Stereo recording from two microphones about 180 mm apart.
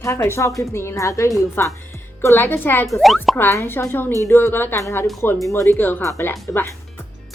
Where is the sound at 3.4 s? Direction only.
10° left (ahead or behind).